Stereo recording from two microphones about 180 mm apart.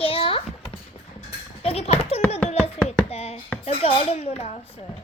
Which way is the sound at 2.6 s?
35° left (ahead or behind).